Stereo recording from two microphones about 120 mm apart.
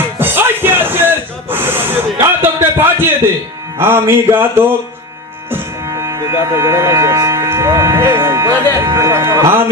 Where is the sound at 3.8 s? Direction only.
20° right (ahead or behind).